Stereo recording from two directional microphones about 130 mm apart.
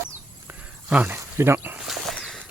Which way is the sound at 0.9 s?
10° right (ahead or behind).